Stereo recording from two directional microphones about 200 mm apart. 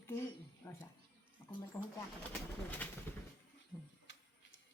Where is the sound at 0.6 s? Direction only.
10° left (ahead or behind).